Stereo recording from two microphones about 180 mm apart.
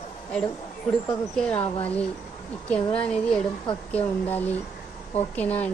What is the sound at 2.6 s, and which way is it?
A woman's voice, 5° left (ahead or behind).